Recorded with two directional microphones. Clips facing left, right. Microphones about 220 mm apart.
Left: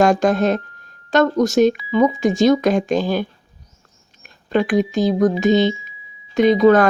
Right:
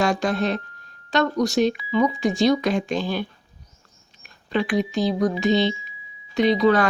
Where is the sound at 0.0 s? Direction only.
45° left (ahead or behind).